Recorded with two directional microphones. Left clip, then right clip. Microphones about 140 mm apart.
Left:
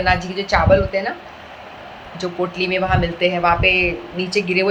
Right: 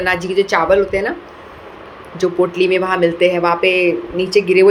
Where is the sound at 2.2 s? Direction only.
40° right (ahead or behind).